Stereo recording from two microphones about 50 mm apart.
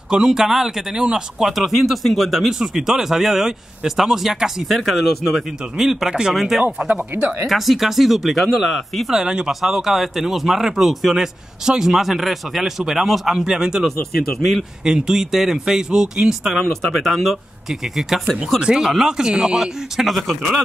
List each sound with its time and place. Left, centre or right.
0.1 s speech: centre
6.3 s speech: centre
9.1 s speech: centre
9.5 s speech: centre
14.4 s speech: right
14.8 s speech: centre
16.6 s speech: centre